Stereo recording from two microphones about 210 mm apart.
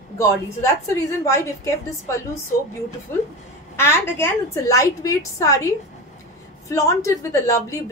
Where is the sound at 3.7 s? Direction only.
10° left (ahead or behind).